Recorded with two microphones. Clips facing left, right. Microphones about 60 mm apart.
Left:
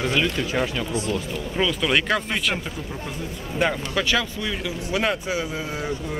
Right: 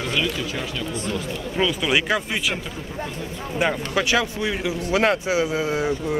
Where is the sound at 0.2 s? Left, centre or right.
Left.